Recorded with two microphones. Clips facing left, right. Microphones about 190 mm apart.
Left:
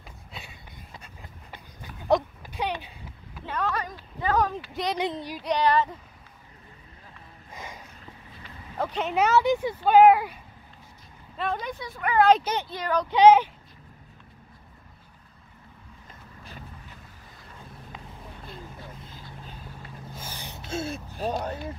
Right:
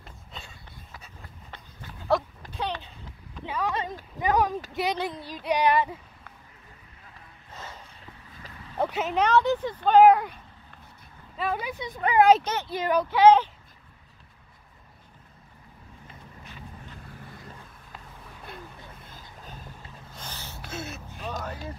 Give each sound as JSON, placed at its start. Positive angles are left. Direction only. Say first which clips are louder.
{"t": 0.0, "sound": "a sound", "louder": "left 1 dB", "side_deg": 10}
{"t": 3.4, "sound": "a sound", "louder": "even", "side_deg": -10}
{"t": 4.2, "sound": "speech", "louder": "right 1 dB", "side_deg": -15}
{"t": 4.9, "sound": "speech", "louder": "left 3 dB", "side_deg": 15}
{"t": 5.4, "sound": "speech", "louder": "even", "side_deg": -10}
{"t": 7.5, "sound": "a sound", "louder": "left 1 dB", "side_deg": 10}
{"t": 8.7, "sound": "speech", "louder": "right 1 dB", "side_deg": -5}
{"t": 9.1, "sound": "speech", "louder": "left 2 dB", "side_deg": 5}
{"t": 11.3, "sound": "speech", "louder": "even", "side_deg": -5}
{"t": 11.8, "sound": "speech", "louder": "right 2 dB", "side_deg": -20}
{"t": 13.1, "sound": "speech", "louder": "left 1 dB", "side_deg": 15}
{"t": 20.1, "sound": "a sound", "louder": "left 1 dB", "side_deg": 10}